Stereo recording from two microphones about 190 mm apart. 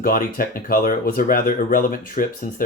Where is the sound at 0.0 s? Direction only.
50° left (ahead or behind).